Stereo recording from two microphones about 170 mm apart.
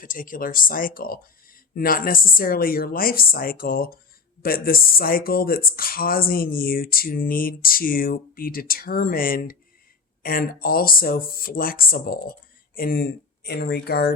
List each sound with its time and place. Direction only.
0.0 s speech: 55° left (ahead or behind); by 14.1 s 70° left (ahead or behind)